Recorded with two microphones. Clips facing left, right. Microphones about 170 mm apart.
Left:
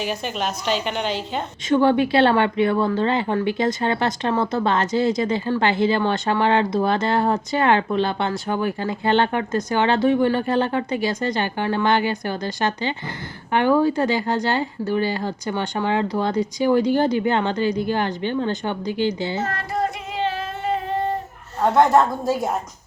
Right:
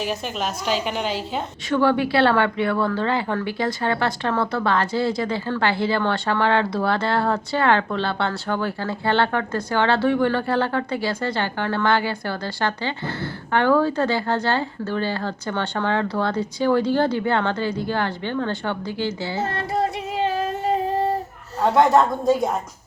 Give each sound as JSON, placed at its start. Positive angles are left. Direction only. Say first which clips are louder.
{"t": 0.0, "sound": "a woman's voice", "louder": "left 1 dB", "side_deg": 0}
{"t": 1.7, "sound": "speech", "louder": "left 2 dB", "side_deg": 20}
{"t": 19.4, "sound": "child singing", "louder": "right 1 dB", "side_deg": -30}
{"t": 20.2, "sound": "a sound", "louder": "right 2 dB", "side_deg": -40}
{"t": 21.6, "sound": "a woman's voice", "louder": "even", "side_deg": 0}